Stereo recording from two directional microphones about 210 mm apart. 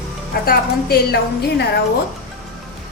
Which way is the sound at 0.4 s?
45° left (ahead or behind).